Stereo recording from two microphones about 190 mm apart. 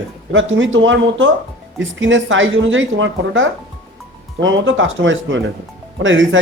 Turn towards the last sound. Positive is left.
turn(degrees=-90)